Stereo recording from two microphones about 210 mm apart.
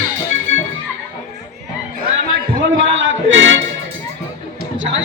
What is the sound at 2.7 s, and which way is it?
Music, 65° right (ahead or behind).